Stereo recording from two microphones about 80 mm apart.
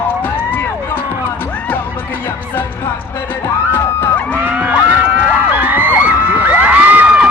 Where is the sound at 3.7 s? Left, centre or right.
Left.